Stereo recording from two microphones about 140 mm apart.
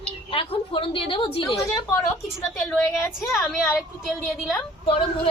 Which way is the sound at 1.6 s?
20° left (ahead or behind).